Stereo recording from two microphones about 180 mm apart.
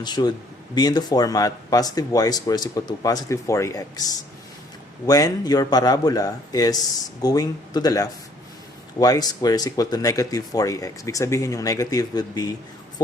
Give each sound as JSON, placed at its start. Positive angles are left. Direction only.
{"t": 0.0, "sound": "speech", "side_deg": 25}